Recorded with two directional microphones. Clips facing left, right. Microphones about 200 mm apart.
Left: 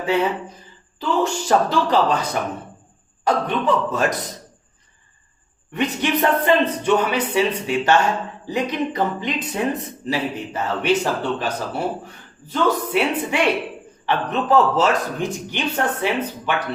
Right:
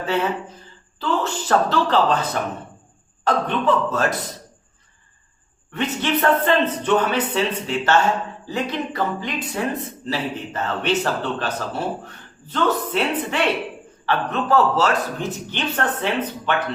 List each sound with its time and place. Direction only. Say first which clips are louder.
0.0 s speech: left 2 dB; 15° left (ahead or behind)
5.7 s speech: left 1 dB; 15° left (ahead or behind)